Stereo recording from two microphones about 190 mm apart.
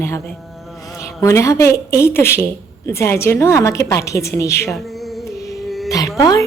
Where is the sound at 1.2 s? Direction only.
15° left (ahead or behind).